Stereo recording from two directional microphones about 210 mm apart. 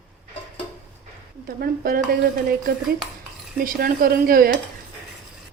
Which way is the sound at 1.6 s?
45° right (ahead or behind).